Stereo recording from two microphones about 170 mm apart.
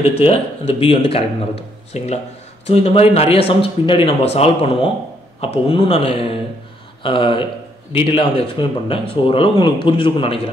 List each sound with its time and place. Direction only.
0.2 s speech: 35° left (ahead or behind)